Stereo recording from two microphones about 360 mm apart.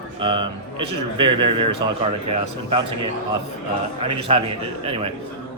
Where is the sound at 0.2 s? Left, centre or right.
Centre.